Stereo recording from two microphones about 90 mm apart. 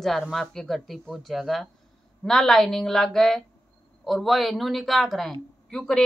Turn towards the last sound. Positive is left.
turn(degrees=5)  # may be behind; listen again after turning